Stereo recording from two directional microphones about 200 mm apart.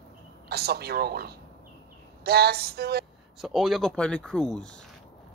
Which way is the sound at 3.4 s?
Centre (ahead or behind).